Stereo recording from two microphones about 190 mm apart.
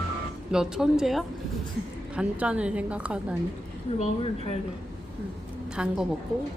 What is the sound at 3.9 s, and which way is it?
Speech, 35° left (ahead or behind).